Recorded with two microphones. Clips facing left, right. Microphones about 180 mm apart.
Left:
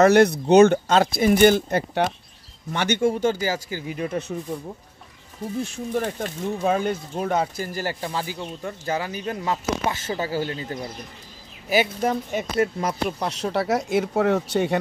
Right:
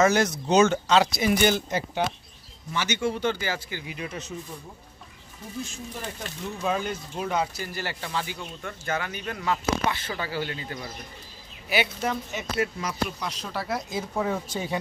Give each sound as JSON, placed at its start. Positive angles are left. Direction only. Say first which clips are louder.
{"t": 0.0, "sound": "speech", "louder": "left 7 dB", "side_deg": 60}
{"t": 5.6, "sound": "speech", "louder": "left 9 dB", "side_deg": 55}
{"t": 9.8, "sound": "speech", "louder": "left 4 dB", "side_deg": 45}